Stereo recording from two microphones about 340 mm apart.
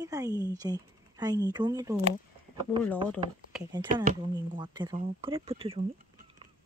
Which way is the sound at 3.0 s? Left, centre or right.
Centre.